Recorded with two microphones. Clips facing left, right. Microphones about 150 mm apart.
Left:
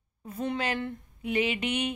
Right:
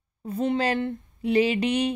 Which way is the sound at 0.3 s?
25° right (ahead or behind).